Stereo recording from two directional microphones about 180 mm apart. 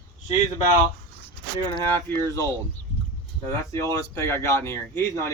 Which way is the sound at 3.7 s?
15° left (ahead or behind).